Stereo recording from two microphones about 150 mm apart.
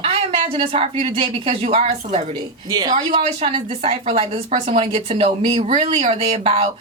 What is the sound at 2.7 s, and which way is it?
Speech, 30° right (ahead or behind).